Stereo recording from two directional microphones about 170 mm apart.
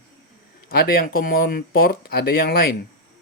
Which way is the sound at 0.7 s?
60° left (ahead or behind).